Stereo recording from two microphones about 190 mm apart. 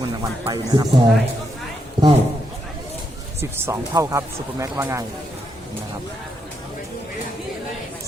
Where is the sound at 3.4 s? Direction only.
15° right (ahead or behind).